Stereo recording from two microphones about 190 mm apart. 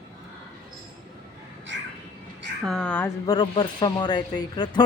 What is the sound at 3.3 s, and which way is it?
Speech, 25° left (ahead or behind).